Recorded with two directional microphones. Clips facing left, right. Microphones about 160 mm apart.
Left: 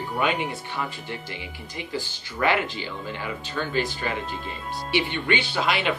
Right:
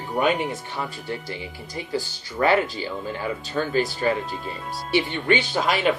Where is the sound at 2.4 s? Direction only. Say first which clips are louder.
Right 4 dB; 40° right (ahead or behind).